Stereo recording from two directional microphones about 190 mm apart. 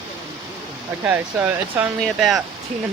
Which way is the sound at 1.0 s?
10° right (ahead or behind).